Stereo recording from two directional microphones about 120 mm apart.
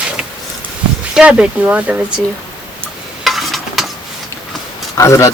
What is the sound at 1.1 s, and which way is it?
Speech, 10° right (ahead or behind).